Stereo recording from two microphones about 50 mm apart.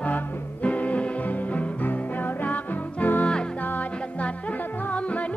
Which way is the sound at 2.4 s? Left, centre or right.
Left.